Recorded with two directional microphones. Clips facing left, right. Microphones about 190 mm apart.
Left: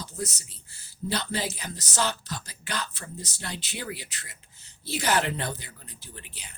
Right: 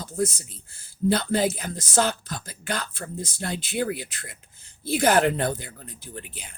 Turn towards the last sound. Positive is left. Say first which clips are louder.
# right 7 dB
turn(degrees=-50)  # may be behind; listen again after turning